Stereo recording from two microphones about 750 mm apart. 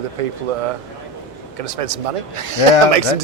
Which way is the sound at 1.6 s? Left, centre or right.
Right.